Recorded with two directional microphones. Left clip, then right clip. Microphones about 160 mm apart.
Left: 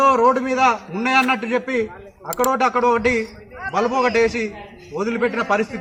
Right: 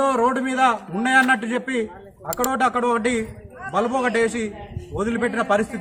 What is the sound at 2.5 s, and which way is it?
A man's voice, 20° right (ahead or behind).